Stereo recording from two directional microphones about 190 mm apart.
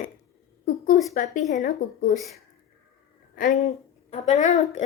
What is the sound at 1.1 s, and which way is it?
Speech, 45° left (ahead or behind).